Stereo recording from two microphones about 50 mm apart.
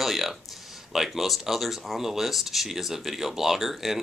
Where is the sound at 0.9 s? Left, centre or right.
Centre.